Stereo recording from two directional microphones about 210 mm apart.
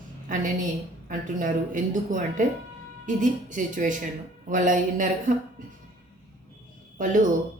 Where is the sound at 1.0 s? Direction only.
40° right (ahead or behind).